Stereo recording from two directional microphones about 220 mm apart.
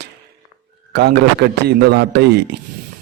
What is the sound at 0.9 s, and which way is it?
A man's voice, 50° right (ahead or behind).